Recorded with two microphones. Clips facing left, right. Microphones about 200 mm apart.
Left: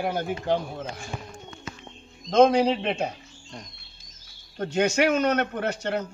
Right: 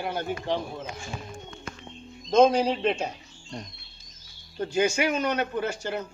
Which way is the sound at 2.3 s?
60° left (ahead or behind).